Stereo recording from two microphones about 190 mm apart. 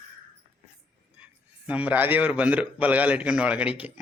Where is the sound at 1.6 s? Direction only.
5° right (ahead or behind).